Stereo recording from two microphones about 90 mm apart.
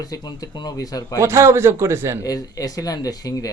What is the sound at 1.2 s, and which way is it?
Speech, 30° right (ahead or behind).